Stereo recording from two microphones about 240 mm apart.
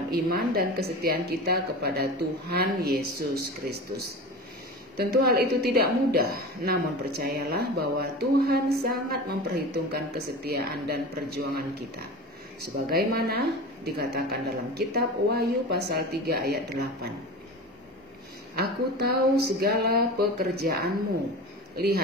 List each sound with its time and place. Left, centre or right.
0.1 s a woman's voice: right
12.9 s a woman's voice: right
18.6 s a woman's voice: right